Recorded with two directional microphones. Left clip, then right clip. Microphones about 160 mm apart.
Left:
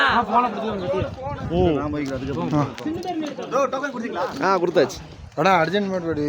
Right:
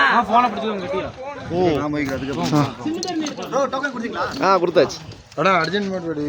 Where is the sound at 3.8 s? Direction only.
40° right (ahead or behind).